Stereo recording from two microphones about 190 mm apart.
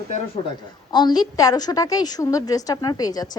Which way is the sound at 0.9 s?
20° left (ahead or behind).